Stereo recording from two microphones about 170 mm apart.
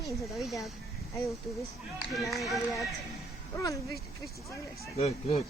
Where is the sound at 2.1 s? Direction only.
Centre (ahead or behind).